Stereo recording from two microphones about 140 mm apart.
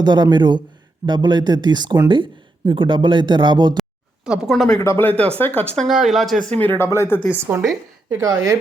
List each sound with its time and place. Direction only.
0.0 s speech: 30° right (ahead or behind)
4.3 s speech: centre (ahead or behind)
4.8 s speech: 15° left (ahead or behind)
6.7 s speech: 20° left (ahead or behind)
7.5 s a woman's voice: 15° right (ahead or behind)
8.1 s a woman's voice: 25° right (ahead or behind)